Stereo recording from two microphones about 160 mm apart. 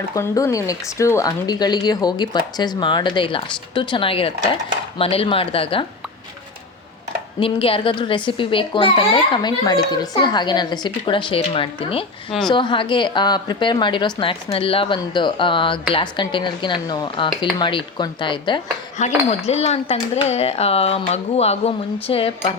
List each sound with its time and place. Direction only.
0.1 s a woman's voice: 20° left (ahead or behind); by 5.8 s 35° left (ahead or behind)
7.3 s a child's voice: 35° left (ahead or behind)
19.0 s a child's voice: 45° left (ahead or behind)